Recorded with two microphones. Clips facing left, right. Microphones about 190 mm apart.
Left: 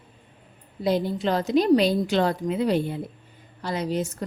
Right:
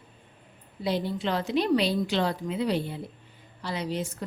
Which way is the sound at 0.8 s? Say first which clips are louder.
Left 5 dB; 45° left (ahead or behind).